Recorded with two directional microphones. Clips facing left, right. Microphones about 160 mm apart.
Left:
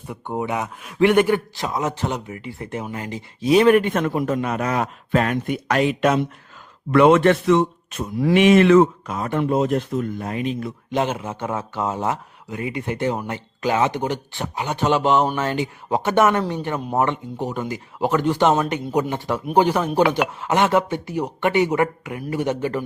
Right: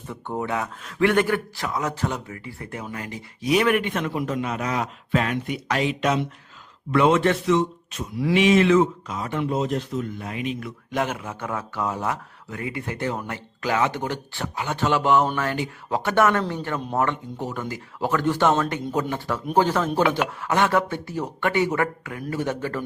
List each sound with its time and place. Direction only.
0.1 s speech: 15° left (ahead or behind); by 3.8 s 30° left (ahead or behind)
3.8 s a man's voice: 45° left (ahead or behind)
10.9 s speech: 25° left (ahead or behind)
20.0 s speech: centre (ahead or behind)
20.4 s speech: 20° left (ahead or behind)